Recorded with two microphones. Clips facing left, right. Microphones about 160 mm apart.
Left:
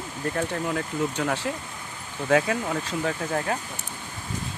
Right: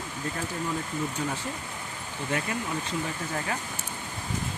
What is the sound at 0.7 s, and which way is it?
Speech, 75° left (ahead or behind).